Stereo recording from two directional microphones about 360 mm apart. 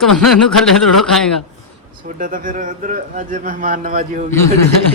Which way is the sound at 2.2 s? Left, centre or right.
Right.